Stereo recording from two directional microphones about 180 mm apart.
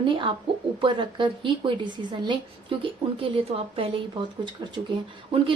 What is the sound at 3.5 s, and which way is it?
Speech, 30° right (ahead or behind).